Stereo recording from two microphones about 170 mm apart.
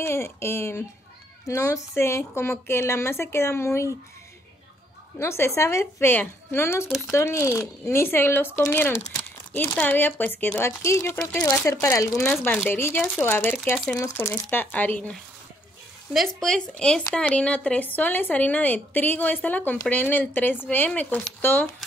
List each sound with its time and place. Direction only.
0.0 s speech: 15° left (ahead or behind)
5.2 s speech: 15° left (ahead or behind)